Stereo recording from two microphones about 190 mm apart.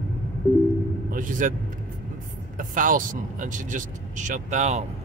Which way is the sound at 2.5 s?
45° right (ahead or behind).